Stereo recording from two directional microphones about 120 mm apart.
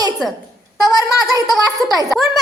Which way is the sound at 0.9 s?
30° left (ahead or behind).